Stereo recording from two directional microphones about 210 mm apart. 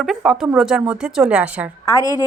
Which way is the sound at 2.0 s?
15° left (ahead or behind).